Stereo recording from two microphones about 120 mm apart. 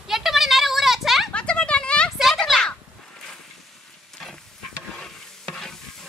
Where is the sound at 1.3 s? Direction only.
10° left (ahead or behind).